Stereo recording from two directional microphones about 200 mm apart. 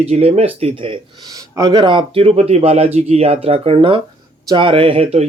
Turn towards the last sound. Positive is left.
turn(degrees=-30)  # may be behind; listen again after turning